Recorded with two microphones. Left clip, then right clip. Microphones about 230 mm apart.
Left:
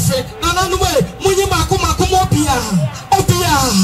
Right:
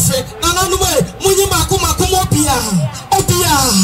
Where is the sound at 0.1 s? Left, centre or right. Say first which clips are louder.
Left 2 dB; right.